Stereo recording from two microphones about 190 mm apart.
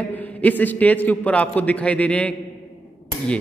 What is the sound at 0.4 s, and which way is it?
A man's voice, 10° left (ahead or behind).